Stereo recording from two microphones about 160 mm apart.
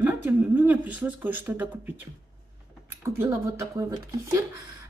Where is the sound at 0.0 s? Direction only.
10° right (ahead or behind).